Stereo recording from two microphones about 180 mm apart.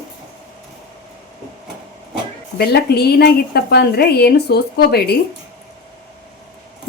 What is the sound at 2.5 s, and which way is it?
A woman's voice, 65° left (ahead or behind).